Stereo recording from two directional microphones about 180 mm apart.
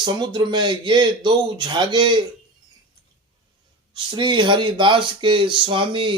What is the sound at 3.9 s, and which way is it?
Speech, 25° right (ahead or behind).